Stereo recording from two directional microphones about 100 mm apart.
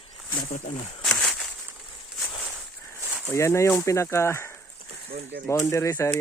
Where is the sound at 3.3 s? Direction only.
30° left (ahead or behind).